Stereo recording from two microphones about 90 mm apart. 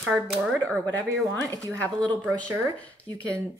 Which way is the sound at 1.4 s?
40° right (ahead or behind).